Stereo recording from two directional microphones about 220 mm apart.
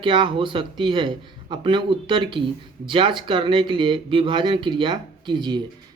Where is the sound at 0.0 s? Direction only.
20° right (ahead or behind).